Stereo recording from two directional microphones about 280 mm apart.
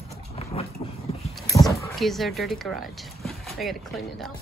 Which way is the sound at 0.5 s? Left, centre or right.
Left.